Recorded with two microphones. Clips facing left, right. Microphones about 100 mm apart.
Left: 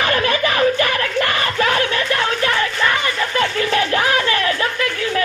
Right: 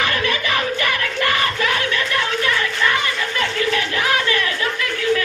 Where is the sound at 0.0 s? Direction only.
35° left (ahead or behind).